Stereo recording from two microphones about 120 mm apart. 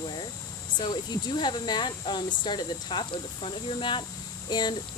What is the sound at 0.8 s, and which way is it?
Speech, 40° left (ahead or behind).